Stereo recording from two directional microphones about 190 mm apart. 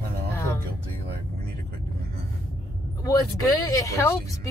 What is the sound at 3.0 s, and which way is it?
Speech, 20° left (ahead or behind).